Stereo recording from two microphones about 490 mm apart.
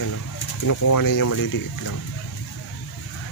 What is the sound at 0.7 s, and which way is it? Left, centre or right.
Speech, left.